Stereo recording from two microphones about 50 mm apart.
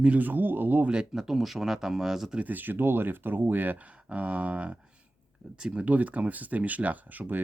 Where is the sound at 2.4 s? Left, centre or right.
Right.